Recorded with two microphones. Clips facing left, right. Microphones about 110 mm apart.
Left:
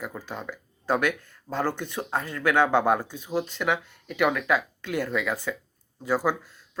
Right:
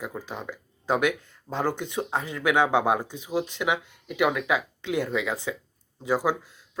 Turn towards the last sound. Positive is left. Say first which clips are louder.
# even
turn(degrees=-15)  # may be behind; listen again after turning